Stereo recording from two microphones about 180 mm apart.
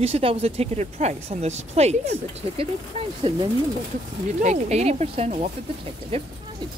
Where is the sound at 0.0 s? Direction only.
30° right (ahead or behind).